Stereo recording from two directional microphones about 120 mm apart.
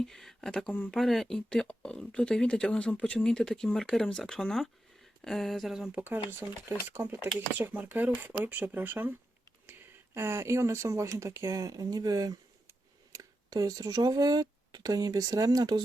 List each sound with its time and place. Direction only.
0.0 s speech: 5° left (ahead or behind)
5.9 s speech: 15° right (ahead or behind)
10.2 s speech: 20° right (ahead or behind)